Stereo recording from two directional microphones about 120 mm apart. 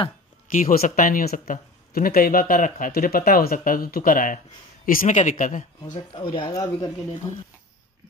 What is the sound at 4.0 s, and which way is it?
Speech, 90° left.